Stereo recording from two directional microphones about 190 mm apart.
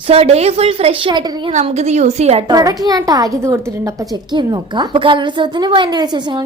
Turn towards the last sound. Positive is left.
turn(degrees=-20)  # may be behind; listen again after turning